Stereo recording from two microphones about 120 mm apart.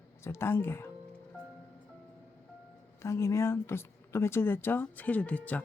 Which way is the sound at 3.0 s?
25° left (ahead or behind).